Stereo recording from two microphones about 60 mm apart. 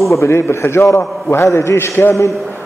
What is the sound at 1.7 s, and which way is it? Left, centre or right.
Speech, left.